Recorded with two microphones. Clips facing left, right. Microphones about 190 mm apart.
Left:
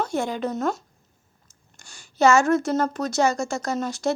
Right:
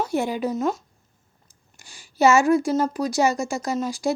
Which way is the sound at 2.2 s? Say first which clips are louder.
Right 1 dB; 15° right (ahead or behind).